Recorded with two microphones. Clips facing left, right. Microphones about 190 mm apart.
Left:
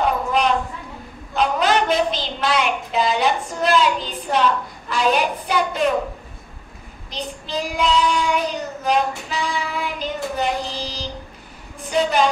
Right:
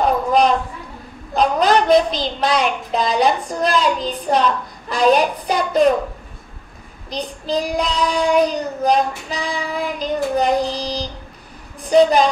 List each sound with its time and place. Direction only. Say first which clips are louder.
1.3 s a woman's voice: right 3 dB; 40° right (ahead or behind)
7.1 s child singing: right 6 dB; 40° right (ahead or behind)